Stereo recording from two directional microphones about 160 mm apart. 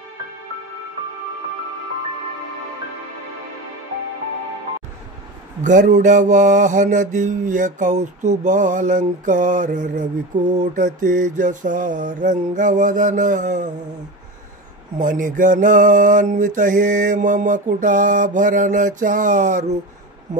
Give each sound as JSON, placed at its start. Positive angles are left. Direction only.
{"t": 5.6, "sound": "mantra", "side_deg": -50}
{"t": 15.0, "sound": "mantra", "side_deg": -55}